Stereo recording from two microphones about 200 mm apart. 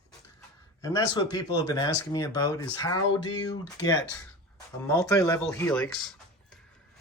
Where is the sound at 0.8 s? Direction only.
20° left (ahead or behind); by 6.6 s centre (ahead or behind).